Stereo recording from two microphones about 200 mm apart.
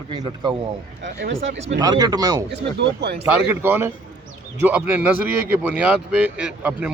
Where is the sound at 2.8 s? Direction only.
55° right (ahead or behind).